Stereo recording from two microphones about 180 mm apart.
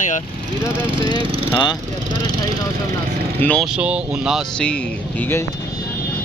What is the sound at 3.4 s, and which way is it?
Speech, 5° left (ahead or behind).